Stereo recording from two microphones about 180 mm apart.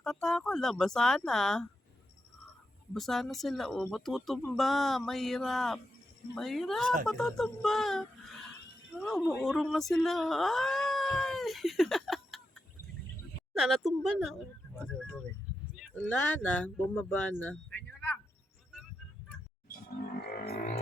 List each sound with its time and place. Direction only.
0.0 s speech: 5° left (ahead or behind)
2.9 s speech: centre (ahead or behind)
13.5 s speech: centre (ahead or behind)
15.7 s speech: 5° left (ahead or behind)
17.4 s a sound: 5° left (ahead or behind)
20.2 s a sound: 60° left (ahead or behind)